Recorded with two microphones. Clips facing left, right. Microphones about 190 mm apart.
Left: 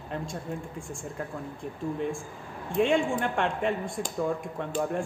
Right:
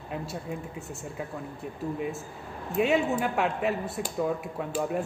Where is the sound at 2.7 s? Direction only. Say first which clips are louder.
Even; 5° right (ahead or behind).